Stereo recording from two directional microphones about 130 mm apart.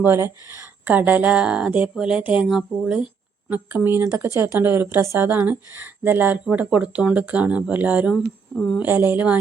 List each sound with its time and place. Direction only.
0.0 s speech: 20° right (ahead or behind)
8.5 s speech: 5° left (ahead or behind)
8.8 s speech: 15° right (ahead or behind)